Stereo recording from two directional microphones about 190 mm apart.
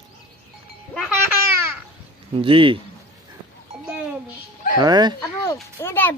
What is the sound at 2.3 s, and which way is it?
Speech, 30° right (ahead or behind).